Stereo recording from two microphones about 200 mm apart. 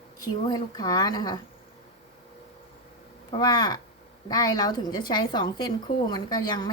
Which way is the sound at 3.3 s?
20° left (ahead or behind).